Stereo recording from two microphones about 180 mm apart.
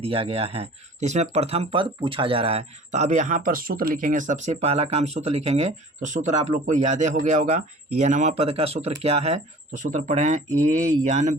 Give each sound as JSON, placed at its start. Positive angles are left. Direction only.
{"t": 0.0, "sound": "speech", "side_deg": -30}